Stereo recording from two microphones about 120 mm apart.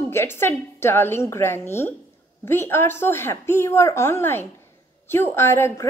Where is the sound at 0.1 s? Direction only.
20° left (ahead or behind).